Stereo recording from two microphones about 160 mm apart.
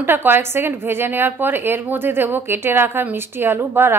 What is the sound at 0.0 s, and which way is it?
A woman's voice, 15° right (ahead or behind).